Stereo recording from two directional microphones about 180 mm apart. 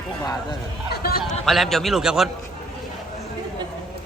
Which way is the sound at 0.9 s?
60° left (ahead or behind).